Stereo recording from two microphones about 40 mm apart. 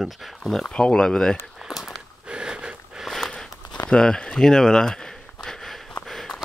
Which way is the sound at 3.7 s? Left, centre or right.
Centre.